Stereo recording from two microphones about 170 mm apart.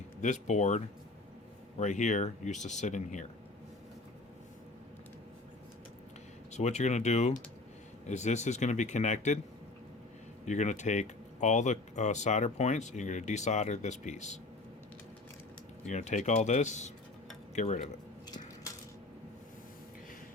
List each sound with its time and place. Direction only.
0.2 s speech: 45° left (ahead or behind)
1.8 s speech: 45° left (ahead or behind)
6.5 s speech: 40° left (ahead or behind)
10.4 s speech: 45° left (ahead or behind)
15.9 s speech: 45° left (ahead or behind)